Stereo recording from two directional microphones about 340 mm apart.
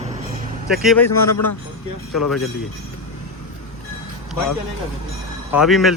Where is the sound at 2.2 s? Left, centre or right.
Centre.